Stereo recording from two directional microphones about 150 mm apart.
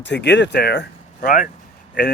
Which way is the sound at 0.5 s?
90° left.